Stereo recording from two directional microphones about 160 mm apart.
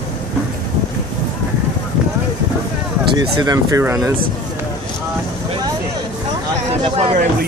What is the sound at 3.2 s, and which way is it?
Speech, 25° right (ahead or behind).